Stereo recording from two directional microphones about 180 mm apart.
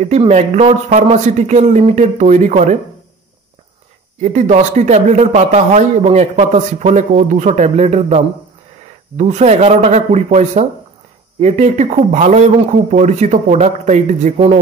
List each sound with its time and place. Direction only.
0.0 s speech: 40° right (ahead or behind)
4.2 s speech: 40° right (ahead or behind)